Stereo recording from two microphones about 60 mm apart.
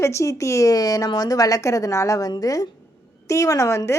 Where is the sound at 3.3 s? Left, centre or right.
Left.